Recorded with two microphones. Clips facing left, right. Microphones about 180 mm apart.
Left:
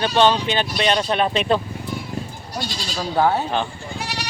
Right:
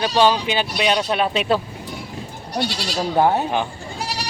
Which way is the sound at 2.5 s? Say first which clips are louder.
Right 5 dB; 65° right (ahead or behind).